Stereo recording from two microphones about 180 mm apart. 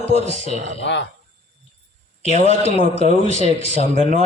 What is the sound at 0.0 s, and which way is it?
Speech, 35° left (ahead or behind).